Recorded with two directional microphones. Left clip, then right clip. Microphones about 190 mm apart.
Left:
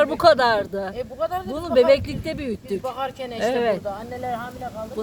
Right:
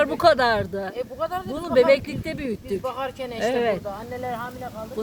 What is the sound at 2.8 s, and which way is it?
Speech, 30° right (ahead or behind).